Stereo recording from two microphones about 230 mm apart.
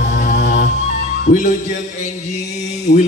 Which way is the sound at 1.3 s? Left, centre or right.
Left.